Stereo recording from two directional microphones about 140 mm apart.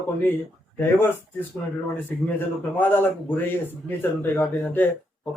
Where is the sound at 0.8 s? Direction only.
15° left (ahead or behind).